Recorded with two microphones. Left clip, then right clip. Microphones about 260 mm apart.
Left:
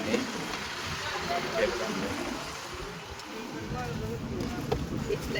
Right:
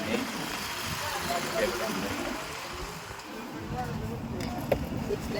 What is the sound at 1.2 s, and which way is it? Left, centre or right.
Vehicle, right.